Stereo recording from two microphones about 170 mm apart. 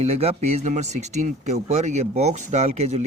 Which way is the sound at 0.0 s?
35° right (ahead or behind).